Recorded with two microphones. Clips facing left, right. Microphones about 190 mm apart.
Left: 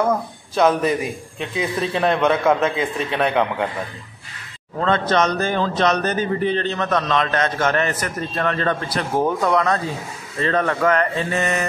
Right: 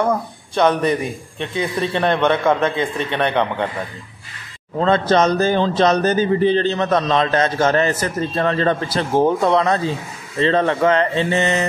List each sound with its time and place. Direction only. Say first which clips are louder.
0.0 s speech: right 1 dB; 5° left (ahead or behind)
4.7 s speech: right 3 dB; 30° right (ahead or behind)